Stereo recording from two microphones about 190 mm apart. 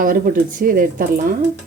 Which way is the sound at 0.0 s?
45° right (ahead or behind).